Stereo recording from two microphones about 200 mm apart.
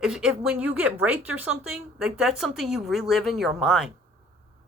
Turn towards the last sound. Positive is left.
turn(degrees=0)  # may be behind; listen again after turning